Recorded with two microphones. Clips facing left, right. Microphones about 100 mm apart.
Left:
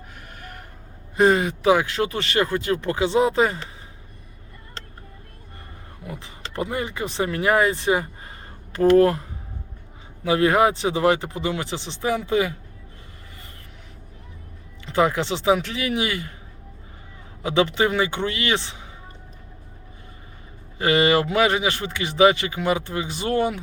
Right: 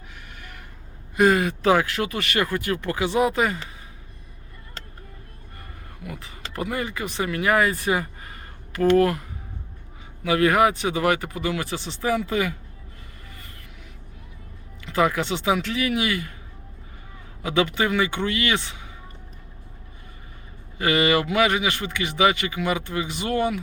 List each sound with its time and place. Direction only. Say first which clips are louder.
0.3 s vehicle: left 5 dB; 40° left (ahead or behind)
1.1 s speech: left 1 dB; 25° left (ahead or behind)
6.0 s speech: left 1 dB; 30° left (ahead or behind)
10.2 s speech: left 1 dB; 30° left (ahead or behind)
14.8 s speech: left 1 dB; 25° left (ahead or behind)
17.4 s speech: left 2 dB; 25° left (ahead or behind)
20.7 s speech: left 2 dB; 30° left (ahead or behind)